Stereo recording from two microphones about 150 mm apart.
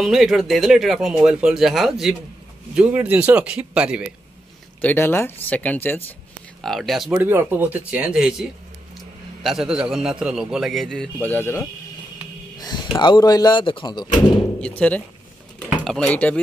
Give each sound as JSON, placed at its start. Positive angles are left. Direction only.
{"t": 0.0, "sound": "speech", "side_deg": 0}
{"t": 4.8, "sound": "speech", "side_deg": 15}
{"t": 6.6, "sound": "speech", "side_deg": 0}
{"t": 7.1, "sound": "speech", "side_deg": -15}
{"t": 11.2, "sound": "speech", "side_deg": 15}
{"t": 12.5, "sound": "speech", "side_deg": 25}
{"t": 14.6, "sound": "speech", "side_deg": 10}